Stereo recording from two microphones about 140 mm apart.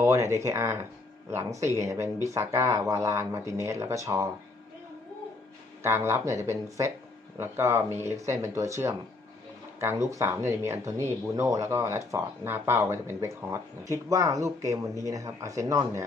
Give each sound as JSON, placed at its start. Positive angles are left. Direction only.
{"t": 0.0, "sound": "speech", "side_deg": -20}
{"t": 5.8, "sound": "speech", "side_deg": -20}